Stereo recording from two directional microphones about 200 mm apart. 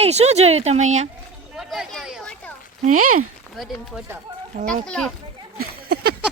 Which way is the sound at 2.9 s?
90° right.